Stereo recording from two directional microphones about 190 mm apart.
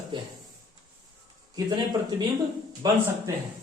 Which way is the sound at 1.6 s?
20° right (ahead or behind).